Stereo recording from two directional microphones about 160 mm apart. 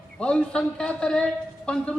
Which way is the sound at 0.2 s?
5° left (ahead or behind).